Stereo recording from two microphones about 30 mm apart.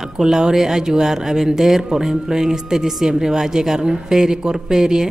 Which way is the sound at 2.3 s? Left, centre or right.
Centre.